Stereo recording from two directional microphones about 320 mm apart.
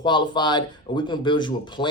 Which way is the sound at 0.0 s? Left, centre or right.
Centre.